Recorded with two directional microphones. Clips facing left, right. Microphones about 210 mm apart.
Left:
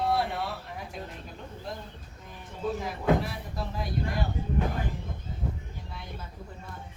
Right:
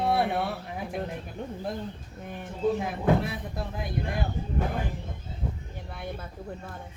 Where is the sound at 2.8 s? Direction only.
60° right (ahead or behind).